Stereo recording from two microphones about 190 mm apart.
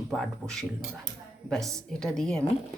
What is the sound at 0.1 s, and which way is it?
Speech, 5° left (ahead or behind).